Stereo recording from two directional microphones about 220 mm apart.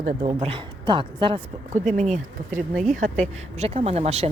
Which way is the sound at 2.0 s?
35° right (ahead or behind).